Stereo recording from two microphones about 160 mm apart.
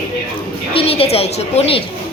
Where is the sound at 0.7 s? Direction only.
35° left (ahead or behind).